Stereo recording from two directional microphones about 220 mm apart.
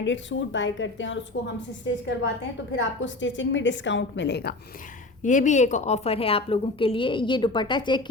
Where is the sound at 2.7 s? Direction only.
55° left (ahead or behind).